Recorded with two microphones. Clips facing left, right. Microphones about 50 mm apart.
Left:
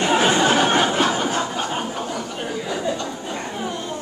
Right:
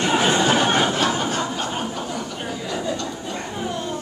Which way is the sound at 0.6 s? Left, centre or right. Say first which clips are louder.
Left 1 dB; centre.